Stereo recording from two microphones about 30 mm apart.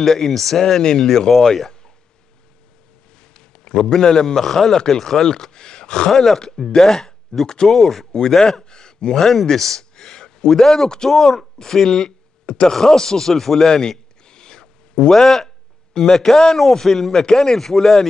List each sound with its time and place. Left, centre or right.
0.0 s a man's voice: centre
3.3 s a sound: left
3.8 s a man's voice: left
5.5 s speech: left
6.1 s a man's voice: centre
7.3 s a man's voice: left
7.6 s a man's voice: centre
8.6 s a sound: left
9.1 s a man's voice: centre
9.9 s a sound: left
10.5 s a man's voice: centre
13.7 s a sound: left
15.0 s a man's voice: centre